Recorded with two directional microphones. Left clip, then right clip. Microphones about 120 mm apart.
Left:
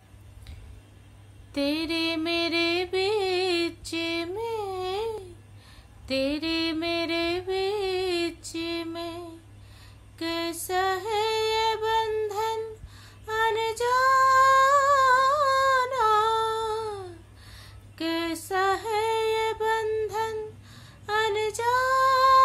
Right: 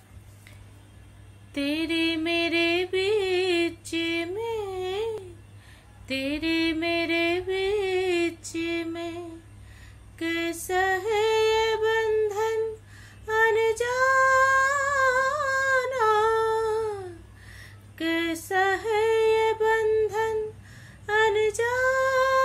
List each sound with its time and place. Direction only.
1.5 s mantra: 30° left (ahead or behind)
6.0 s music: 30° left (ahead or behind)
13.3 s female singing: 25° left (ahead or behind)
15.3 s a sound: 25° left (ahead or behind)
17.9 s female singing: 25° left (ahead or behind)